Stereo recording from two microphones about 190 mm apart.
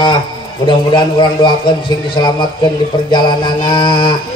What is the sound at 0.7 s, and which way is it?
Speech, 25° left (ahead or behind).